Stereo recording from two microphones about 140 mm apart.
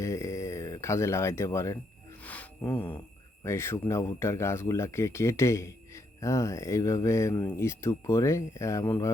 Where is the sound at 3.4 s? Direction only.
20° left (ahead or behind).